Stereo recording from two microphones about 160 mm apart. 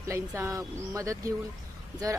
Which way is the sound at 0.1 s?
15° right (ahead or behind).